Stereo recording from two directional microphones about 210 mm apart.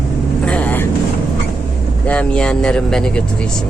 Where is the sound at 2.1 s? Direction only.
5° left (ahead or behind).